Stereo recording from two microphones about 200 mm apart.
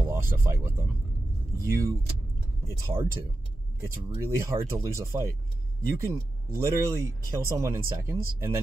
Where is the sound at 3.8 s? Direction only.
15° right (ahead or behind).